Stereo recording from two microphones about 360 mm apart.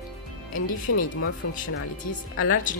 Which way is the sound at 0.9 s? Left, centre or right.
Left.